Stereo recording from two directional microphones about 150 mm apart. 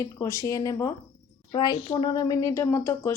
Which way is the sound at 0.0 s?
20° left (ahead or behind).